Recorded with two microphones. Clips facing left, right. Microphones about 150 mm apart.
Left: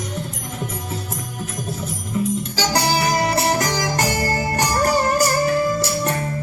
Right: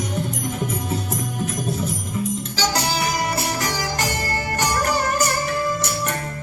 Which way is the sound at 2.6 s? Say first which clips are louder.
Left 2 dB; 40° left (ahead or behind).